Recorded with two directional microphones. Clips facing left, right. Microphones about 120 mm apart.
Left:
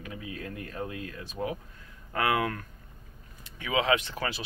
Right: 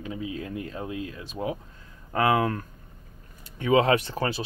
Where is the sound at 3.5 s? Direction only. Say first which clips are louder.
Right 6 dB; 40° right (ahead or behind).